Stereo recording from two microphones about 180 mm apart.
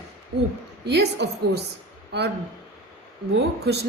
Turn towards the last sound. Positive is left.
turn(degrees=-65)  # may be behind; listen again after turning